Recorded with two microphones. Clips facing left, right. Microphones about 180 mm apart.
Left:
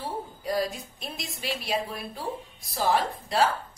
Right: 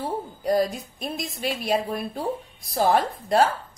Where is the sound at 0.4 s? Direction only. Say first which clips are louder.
Right 6 dB; 50° right (ahead or behind).